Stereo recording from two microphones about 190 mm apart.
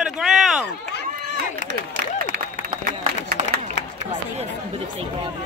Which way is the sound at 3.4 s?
40° right (ahead or behind).